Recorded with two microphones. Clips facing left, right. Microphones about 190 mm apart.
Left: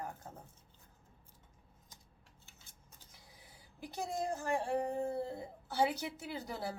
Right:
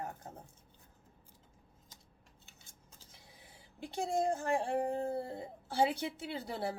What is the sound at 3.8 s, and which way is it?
A woman's voice, 25° right (ahead or behind).